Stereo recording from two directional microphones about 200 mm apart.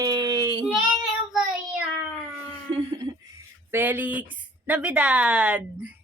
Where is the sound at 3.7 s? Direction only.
10° right (ahead or behind).